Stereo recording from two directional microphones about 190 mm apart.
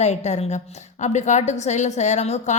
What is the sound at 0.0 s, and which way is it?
A woman's voice, 35° left (ahead or behind).